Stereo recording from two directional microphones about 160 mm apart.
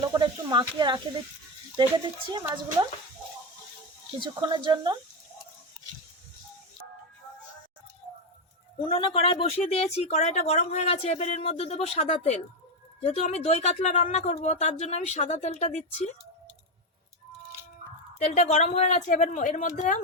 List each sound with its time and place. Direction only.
0.1 s speech: 25° right (ahead or behind)
4.2 s speech: 30° right (ahead or behind)
8.8 s speech: 35° left (ahead or behind)
18.2 s speech: 40° left (ahead or behind)